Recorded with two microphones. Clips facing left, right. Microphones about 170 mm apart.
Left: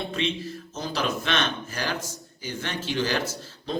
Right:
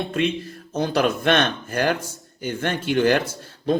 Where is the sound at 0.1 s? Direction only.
50° right (ahead or behind).